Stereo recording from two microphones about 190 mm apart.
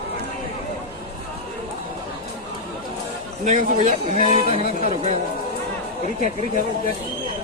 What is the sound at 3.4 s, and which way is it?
A man's voice, 40° right (ahead or behind).